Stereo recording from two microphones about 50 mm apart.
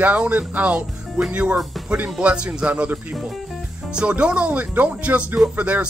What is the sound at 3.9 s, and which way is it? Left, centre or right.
Speech, right.